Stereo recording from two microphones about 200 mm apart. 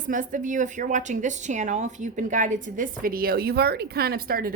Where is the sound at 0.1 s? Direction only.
40° right (ahead or behind).